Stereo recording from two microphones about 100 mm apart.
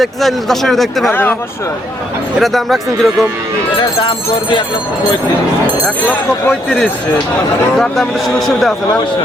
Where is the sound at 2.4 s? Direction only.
Centre (ahead or behind).